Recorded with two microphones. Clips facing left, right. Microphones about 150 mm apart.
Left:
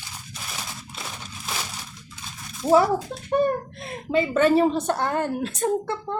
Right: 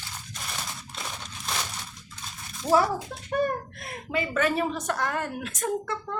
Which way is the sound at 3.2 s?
25° left (ahead or behind).